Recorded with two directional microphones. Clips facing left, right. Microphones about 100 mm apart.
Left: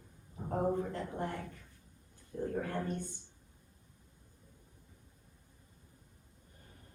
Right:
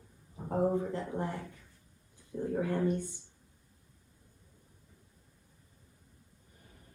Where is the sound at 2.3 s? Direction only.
15° right (ahead or behind).